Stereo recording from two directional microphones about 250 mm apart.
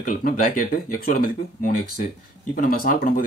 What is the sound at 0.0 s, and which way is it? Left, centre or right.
Speech, left.